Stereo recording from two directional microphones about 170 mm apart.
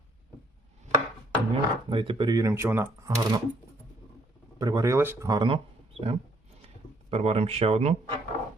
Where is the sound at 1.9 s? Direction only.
30° right (ahead or behind).